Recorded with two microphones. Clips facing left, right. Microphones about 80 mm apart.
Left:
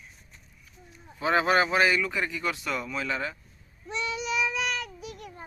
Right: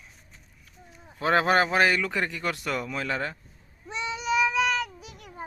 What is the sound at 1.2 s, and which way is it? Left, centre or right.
A man's voice, right.